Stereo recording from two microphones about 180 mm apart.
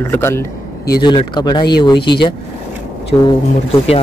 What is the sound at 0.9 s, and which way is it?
Speech, 25° left (ahead or behind).